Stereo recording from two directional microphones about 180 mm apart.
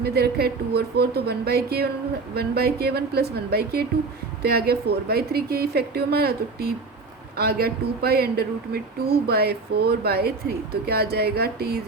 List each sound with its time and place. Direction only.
0.0 s speech: 60° right (ahead or behind)